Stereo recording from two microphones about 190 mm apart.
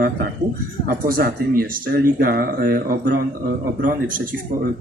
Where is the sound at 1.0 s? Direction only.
50° right (ahead or behind).